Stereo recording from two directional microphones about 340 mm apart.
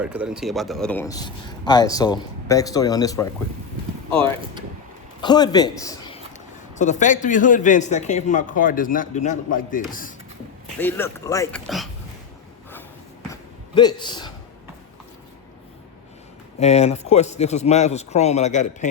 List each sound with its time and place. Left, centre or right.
0.0 s a man's voice: centre
5.2 s a man's voice: centre
10.8 s speech: centre
13.3 s a sound: centre
16.6 s speech: centre